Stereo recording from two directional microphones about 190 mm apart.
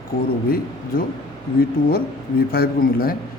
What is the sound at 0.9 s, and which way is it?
A man's voice, 50° left (ahead or behind).